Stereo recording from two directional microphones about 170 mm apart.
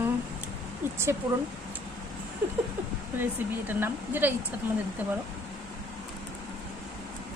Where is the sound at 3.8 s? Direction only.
10° right (ahead or behind).